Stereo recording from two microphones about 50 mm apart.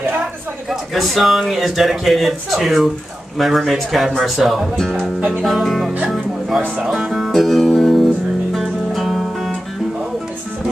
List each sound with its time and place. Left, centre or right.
0.7 s speech: centre
7.4 s music: centre
8.5 s guitar: centre